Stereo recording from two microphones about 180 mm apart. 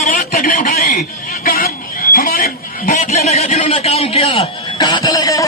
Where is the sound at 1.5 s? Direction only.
55° left (ahead or behind).